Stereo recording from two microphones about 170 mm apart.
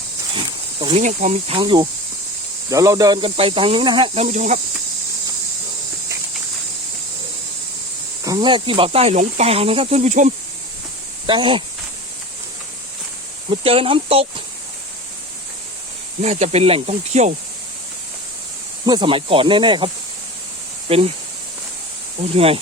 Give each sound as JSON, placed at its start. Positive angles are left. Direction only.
{"t": 0.3, "sound": "speech", "side_deg": -30}
{"t": 8.2, "sound": "speech", "side_deg": -25}
{"t": 11.3, "sound": "speech", "side_deg": -30}
{"t": 13.5, "sound": "speech", "side_deg": -35}
{"t": 16.2, "sound": "speech", "side_deg": -40}
{"t": 18.9, "sound": "speech", "side_deg": -30}
{"t": 22.2, "sound": "speech", "side_deg": -35}